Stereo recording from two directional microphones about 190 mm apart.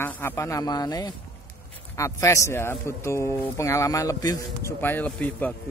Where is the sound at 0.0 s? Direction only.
10° left (ahead or behind).